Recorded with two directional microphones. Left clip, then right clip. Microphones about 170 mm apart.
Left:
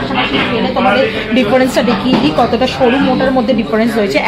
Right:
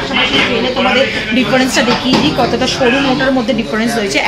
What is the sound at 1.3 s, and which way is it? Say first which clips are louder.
Speech: left 2 dB; 60° left (ahead or behind).